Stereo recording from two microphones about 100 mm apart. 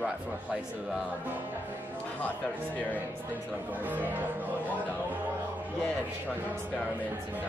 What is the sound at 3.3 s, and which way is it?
Speech, 15° right (ahead or behind).